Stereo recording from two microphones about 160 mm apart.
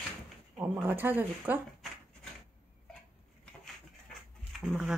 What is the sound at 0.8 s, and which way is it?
Speech, 10° right (ahead or behind).